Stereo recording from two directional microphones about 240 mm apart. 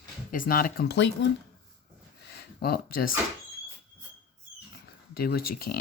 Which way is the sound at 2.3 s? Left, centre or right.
Left.